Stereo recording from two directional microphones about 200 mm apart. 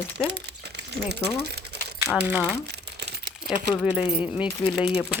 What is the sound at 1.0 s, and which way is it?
Speech, 55° right (ahead or behind).